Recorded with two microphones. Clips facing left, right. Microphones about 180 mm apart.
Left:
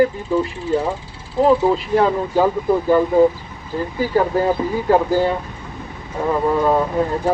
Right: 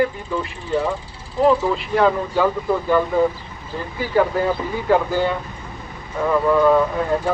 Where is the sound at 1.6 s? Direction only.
35° left (ahead or behind).